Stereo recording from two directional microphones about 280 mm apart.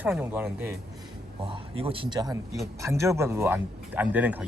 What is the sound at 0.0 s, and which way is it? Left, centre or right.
Speech, centre.